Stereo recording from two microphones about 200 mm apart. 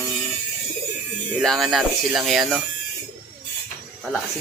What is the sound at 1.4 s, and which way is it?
Speech, centre (ahead or behind).